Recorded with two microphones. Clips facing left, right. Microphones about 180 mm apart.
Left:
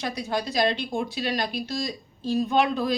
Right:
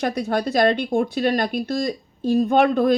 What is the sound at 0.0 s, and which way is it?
Speech, 55° right (ahead or behind).